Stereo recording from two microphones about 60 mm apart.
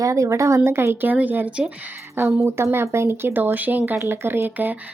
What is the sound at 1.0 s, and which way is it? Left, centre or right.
Speech, right.